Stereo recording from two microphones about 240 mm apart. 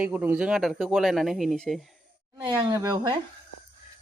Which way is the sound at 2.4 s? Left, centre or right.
Centre.